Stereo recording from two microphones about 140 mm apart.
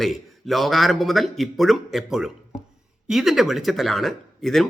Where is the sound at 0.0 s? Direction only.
Centre (ahead or behind).